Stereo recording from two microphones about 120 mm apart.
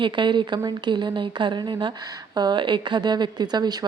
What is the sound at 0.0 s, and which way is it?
Speech, 40° right (ahead or behind).